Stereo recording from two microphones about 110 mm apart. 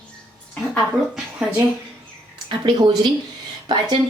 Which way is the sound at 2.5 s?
45° right (ahead or behind).